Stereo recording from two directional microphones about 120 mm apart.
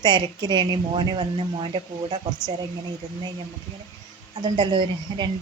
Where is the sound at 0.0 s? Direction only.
35° right (ahead or behind).